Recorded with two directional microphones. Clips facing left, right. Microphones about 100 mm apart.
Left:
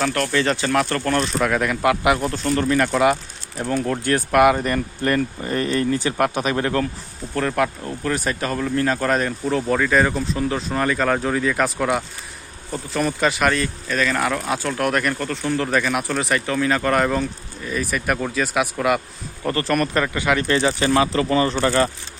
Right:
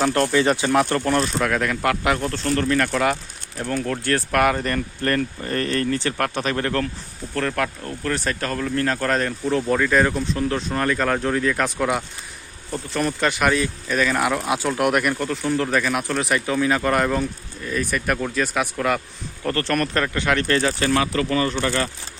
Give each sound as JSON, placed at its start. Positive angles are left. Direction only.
{"t": 0.0, "sound": "speech", "side_deg": -25}
{"t": 1.2, "sound": "speech", "side_deg": 5}